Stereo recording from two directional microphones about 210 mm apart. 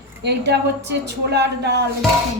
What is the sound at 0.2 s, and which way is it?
A woman's voice, 55° right (ahead or behind).